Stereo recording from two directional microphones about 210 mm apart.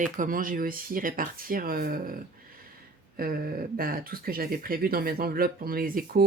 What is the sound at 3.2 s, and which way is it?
Speech, 45° right (ahead or behind).